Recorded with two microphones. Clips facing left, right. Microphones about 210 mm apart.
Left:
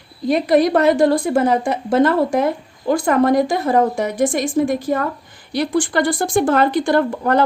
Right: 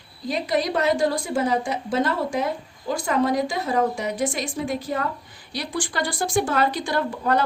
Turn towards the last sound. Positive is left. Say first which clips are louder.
# left 6 dB
turn(degrees=55)  # may be behind; listen again after turning